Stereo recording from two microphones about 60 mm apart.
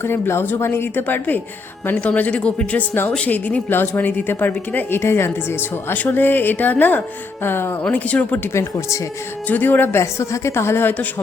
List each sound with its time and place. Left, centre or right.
0.0 s a woman's voice: left
4.9 s a woman's voice: left
5.9 s a woman's voice: left
7.9 s speech: left
9.5 s a woman's voice: left
10.0 s a woman's voice: left